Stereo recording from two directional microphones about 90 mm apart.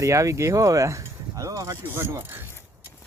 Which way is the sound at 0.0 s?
35° right (ahead or behind).